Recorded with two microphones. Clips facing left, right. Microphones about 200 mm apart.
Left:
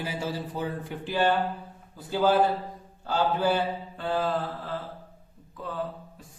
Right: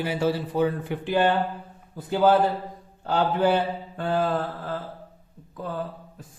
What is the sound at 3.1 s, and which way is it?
A man's voice, 60° right (ahead or behind).